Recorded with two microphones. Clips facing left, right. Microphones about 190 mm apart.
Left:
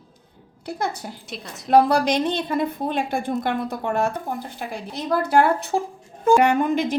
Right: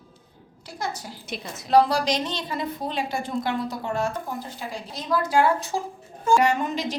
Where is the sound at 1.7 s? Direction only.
55° left (ahead or behind).